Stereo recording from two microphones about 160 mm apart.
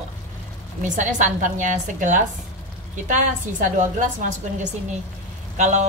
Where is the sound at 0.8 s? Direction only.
55° right (ahead or behind).